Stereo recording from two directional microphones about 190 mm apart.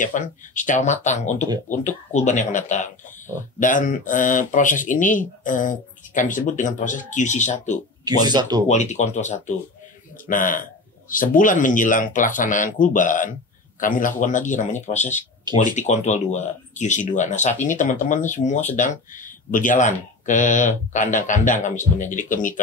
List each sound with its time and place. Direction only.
0.0 s a man's voice: 40° left (ahead or behind)
8.0 s speech: 20° right (ahead or behind)
8.6 s a man's voice: 35° left (ahead or behind)